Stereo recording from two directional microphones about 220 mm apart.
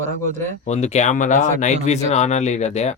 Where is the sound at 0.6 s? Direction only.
30° left (ahead or behind).